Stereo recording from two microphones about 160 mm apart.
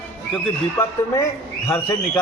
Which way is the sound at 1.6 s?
15° left (ahead or behind).